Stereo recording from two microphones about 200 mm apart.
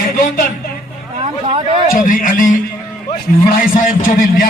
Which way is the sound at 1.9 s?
45° left (ahead or behind).